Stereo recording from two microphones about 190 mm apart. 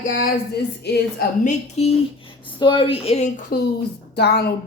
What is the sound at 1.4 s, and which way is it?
Speech, 35° left (ahead or behind).